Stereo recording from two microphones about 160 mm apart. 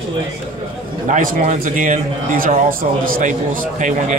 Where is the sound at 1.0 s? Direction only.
55° right (ahead or behind).